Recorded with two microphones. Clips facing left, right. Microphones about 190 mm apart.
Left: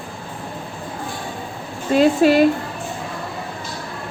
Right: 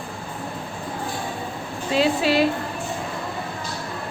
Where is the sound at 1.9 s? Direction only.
45° left (ahead or behind).